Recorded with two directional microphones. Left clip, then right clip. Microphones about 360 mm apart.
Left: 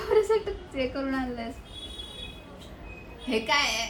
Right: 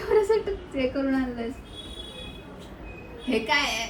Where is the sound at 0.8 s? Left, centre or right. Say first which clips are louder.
Right 3 dB; centre.